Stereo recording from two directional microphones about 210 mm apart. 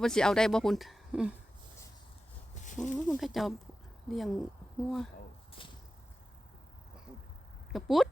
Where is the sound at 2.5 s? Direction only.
35° left (ahead or behind).